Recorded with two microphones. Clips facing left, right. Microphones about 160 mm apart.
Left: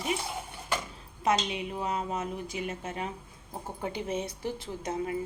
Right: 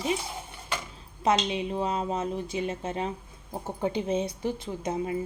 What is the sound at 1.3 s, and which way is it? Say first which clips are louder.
Speech: right 3 dB; 25° right (ahead or behind).